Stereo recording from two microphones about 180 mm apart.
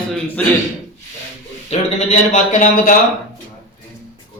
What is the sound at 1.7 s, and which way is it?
A man's voice, 35° left (ahead or behind).